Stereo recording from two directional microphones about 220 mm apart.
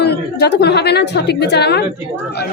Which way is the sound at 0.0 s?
50° left (ahead or behind).